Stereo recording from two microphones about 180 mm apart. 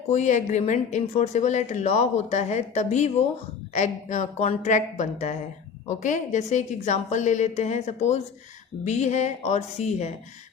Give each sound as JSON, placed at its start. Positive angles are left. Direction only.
{"t": 0.1, "sound": "speech", "side_deg": 40}